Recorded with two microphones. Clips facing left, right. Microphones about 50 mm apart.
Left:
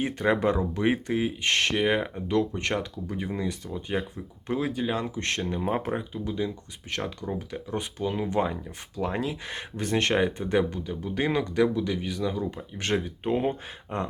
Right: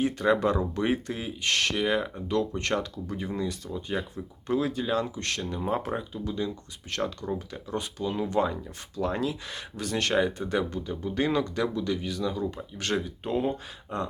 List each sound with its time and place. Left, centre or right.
0.0 s speech: left
10.2 s speech: centre
10.8 s speech: centre; by 14.1 s left